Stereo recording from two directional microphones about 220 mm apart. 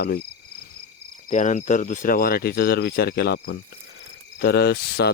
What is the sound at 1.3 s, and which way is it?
Cricket, 35° left (ahead or behind).